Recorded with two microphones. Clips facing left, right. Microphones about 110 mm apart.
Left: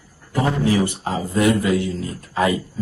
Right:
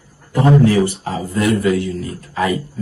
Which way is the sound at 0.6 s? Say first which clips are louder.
Right 5 dB; 20° left (ahead or behind).